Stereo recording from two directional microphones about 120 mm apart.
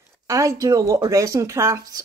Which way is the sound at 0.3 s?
25° right (ahead or behind).